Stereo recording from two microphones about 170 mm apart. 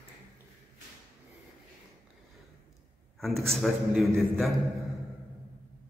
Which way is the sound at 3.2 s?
Centre (ahead or behind).